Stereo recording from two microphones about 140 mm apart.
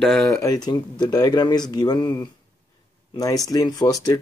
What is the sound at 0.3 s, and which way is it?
Speech, 25° left (ahead or behind).